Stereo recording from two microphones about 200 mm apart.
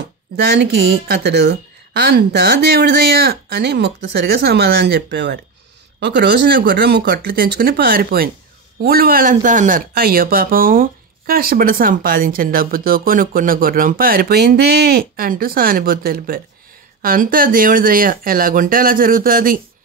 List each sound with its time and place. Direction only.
0.4 s speech: 55° right (ahead or behind)